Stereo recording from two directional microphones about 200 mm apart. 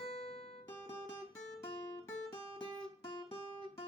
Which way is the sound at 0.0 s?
30° left (ahead or behind).